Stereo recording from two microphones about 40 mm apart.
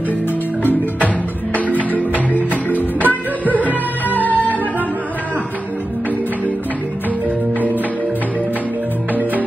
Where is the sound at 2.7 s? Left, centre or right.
Right.